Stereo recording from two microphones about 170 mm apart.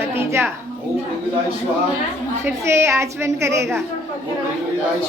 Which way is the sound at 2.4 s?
15° right (ahead or behind).